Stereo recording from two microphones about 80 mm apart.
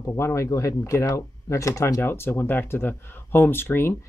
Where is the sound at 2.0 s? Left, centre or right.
Left.